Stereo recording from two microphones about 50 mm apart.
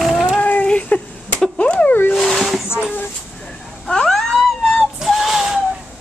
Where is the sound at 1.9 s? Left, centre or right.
Left.